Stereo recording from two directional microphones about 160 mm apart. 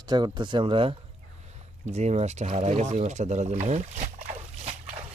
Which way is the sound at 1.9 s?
45° right (ahead or behind).